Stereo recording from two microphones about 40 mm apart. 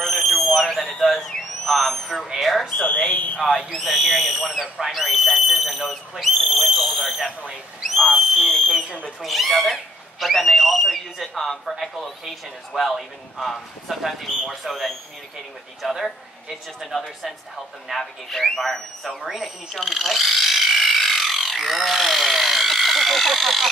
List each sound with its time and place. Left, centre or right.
0.0 s a sound: centre
1.0 s owl: centre
2.4 s smoke detector: centre
3.1 s speech: left
3.7 s speech: centre
16.0 s speech: centre
19.2 s speech: centre
19.7 s tools: centre